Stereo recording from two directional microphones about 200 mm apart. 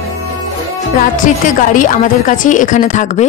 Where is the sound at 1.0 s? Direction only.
40° left (ahead or behind).